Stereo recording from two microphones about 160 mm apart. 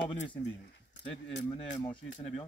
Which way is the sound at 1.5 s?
35° left (ahead or behind).